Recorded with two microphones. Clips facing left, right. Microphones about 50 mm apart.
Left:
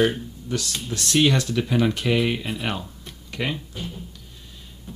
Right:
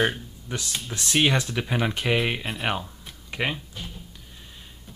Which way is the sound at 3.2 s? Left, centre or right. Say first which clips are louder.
Even; centre.